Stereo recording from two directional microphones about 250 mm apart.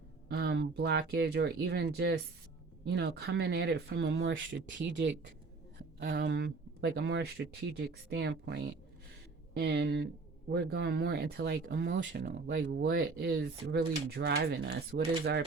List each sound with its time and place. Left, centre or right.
0.3 s speech: right
9.6 s speech: right